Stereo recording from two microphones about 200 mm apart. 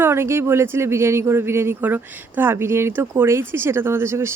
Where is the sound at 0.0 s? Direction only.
10° right (ahead or behind).